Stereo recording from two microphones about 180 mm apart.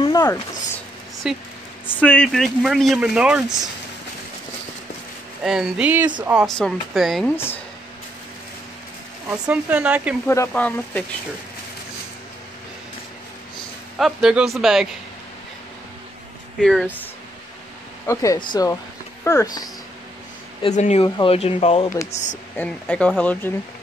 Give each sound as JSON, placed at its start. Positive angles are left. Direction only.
{"t": 0.0, "sound": "a sound", "side_deg": 20}
{"t": 1.2, "sound": "speech", "side_deg": 0}
{"t": 1.9, "sound": "speech", "side_deg": 10}
{"t": 5.4, "sound": "speech", "side_deg": -5}
{"t": 7.3, "sound": "speech", "side_deg": 10}
{"t": 9.3, "sound": "speech", "side_deg": -10}
{"t": 10.2, "sound": "speech", "side_deg": 15}
{"t": 13.9, "sound": "speech", "side_deg": 0}
{"t": 16.5, "sound": "speech", "side_deg": 0}
{"t": 18.0, "sound": "speech", "side_deg": 20}
{"t": 20.6, "sound": "speech", "side_deg": 40}
{"t": 22.6, "sound": "speech", "side_deg": 5}